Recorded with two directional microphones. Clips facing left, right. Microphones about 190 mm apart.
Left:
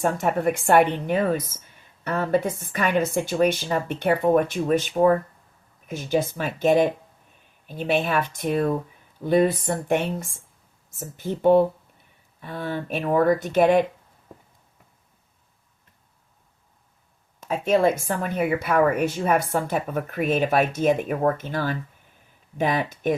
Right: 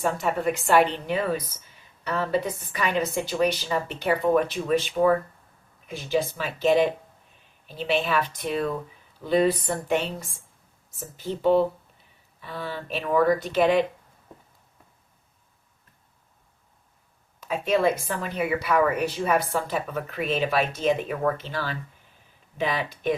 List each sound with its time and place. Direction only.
0.0 s a woman's voice: 50° left (ahead or behind)
18.0 s a woman's voice: 50° left (ahead or behind)